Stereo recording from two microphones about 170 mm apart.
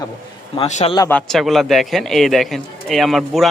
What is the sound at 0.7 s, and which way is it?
Speech, 45° left (ahead or behind).